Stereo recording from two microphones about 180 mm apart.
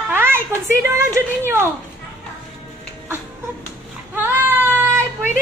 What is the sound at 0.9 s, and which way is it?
Speech, 15° right (ahead or behind).